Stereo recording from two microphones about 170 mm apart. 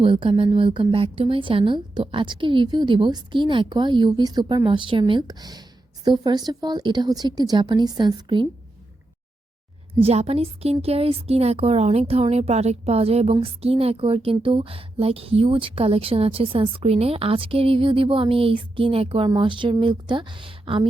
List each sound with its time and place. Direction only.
0.0 s a woman's voice: 30° right (ahead or behind)
10.0 s a woman's voice: 35° right (ahead or behind)